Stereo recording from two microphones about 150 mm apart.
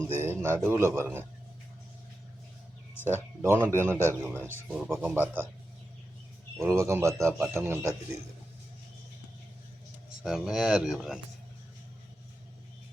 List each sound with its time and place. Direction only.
0.2 s a man's voice: 15° right (ahead or behind)
3.1 s a man's voice: 15° right (ahead or behind)
4.7 s a man's voice: 5° right (ahead or behind)
6.7 s a man's voice: 20° right (ahead or behind)
10.2 s speech: centre (ahead or behind)